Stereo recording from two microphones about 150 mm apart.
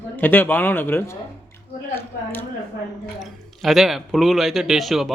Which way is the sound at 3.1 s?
Centre (ahead or behind).